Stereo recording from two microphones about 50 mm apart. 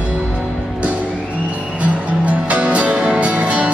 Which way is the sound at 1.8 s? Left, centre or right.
Right.